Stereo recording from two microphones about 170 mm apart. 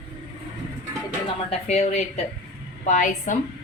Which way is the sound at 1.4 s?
40° left (ahead or behind).